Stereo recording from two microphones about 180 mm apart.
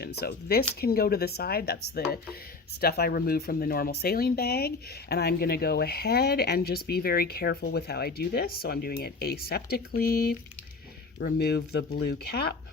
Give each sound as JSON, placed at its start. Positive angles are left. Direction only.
{"t": 0.0, "sound": "speech", "side_deg": 60}
{"t": 2.8, "sound": "speech", "side_deg": 60}